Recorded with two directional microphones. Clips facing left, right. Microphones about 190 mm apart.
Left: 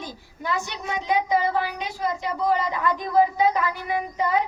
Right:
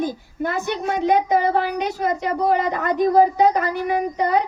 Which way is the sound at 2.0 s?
60° right (ahead or behind).